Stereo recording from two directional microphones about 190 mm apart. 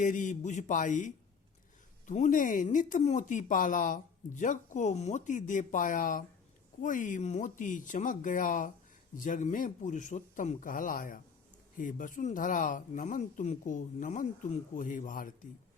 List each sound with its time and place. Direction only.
0.0 s speech: 40° left (ahead or behind)